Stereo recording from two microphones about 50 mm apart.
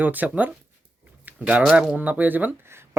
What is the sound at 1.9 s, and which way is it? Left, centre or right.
Speech, right.